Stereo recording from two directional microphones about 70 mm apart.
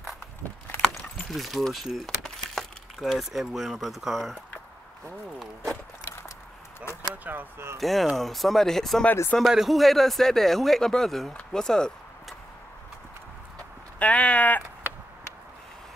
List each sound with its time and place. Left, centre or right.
1.3 s speech: centre
6.8 s a sound: left
7.2 s speech: right
7.8 s speech: centre
11.5 s a sound: centre
13.9 s speech: centre